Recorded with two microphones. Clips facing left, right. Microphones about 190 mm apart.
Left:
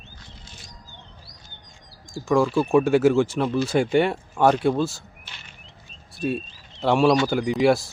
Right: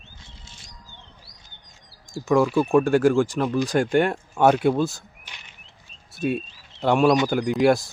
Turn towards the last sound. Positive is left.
turn(degrees=0)  # may be behind; listen again after turning